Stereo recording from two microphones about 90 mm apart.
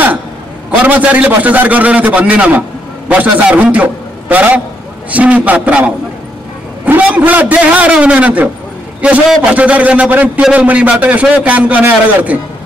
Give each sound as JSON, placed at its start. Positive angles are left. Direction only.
{"t": 0.7, "sound": "a man's voice", "side_deg": -20}